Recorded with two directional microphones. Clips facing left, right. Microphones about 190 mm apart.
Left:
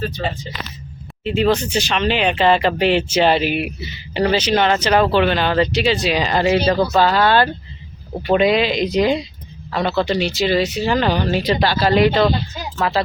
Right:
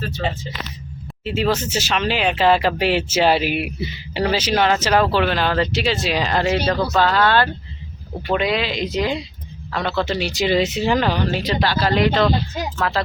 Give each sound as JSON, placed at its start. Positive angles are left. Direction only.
{"t": 1.2, "sound": "speech", "side_deg": -5}
{"t": 9.7, "sound": "speech", "side_deg": 5}
{"t": 10.3, "sound": "speech", "side_deg": -20}
{"t": 10.9, "sound": "speech", "side_deg": -5}
{"t": 11.3, "sound": "speech", "side_deg": 15}